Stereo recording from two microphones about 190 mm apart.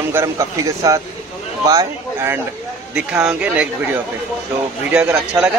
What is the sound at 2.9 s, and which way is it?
A man's voice, 5° right (ahead or behind).